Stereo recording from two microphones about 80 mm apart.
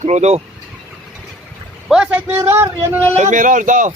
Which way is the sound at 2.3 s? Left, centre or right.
Right.